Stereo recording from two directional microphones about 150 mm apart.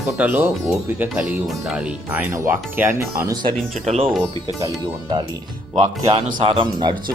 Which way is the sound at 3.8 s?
45° right (ahead or behind).